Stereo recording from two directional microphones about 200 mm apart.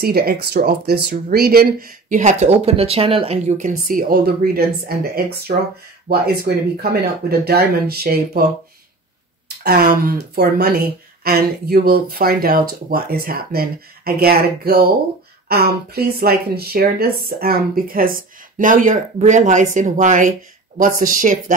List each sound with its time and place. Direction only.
0.0 s speech: 50° right (ahead or behind)
9.6 s speech: 45° right (ahead or behind)